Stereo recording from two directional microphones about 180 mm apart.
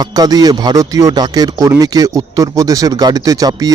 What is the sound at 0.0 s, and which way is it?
Speech, 20° right (ahead or behind).